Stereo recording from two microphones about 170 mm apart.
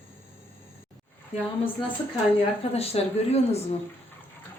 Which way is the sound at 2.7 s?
35° left (ahead or behind).